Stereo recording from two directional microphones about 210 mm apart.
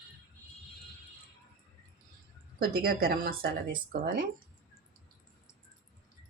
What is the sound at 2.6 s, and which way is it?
Speech, 45° right (ahead or behind).